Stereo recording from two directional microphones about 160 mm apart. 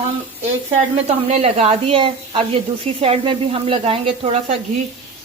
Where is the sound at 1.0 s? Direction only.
40° right (ahead or behind).